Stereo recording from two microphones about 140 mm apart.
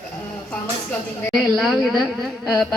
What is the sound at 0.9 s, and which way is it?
A woman's voice, centre (ahead or behind).